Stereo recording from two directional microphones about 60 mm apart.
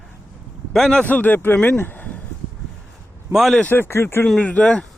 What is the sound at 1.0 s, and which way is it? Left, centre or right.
Speech, left.